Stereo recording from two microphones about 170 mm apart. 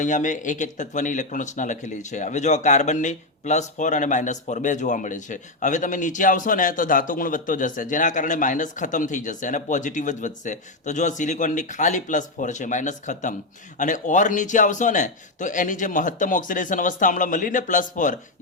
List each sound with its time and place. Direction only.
0.0 s speech: 45° left (ahead or behind)